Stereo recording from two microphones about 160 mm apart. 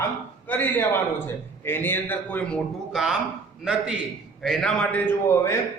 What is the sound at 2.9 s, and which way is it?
A man's voice, centre (ahead or behind).